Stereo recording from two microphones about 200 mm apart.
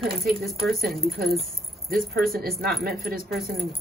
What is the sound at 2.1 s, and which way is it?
Speech, 50° right (ahead or behind).